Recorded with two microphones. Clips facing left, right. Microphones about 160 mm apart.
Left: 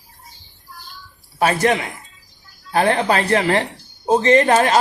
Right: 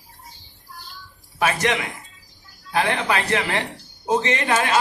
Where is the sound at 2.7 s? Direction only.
45° left (ahead or behind).